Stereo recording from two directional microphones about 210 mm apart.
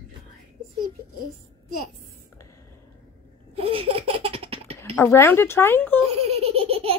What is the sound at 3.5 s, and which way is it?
Laughter, 30° right (ahead or behind).